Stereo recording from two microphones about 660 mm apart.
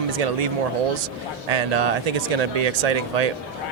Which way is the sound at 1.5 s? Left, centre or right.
Right.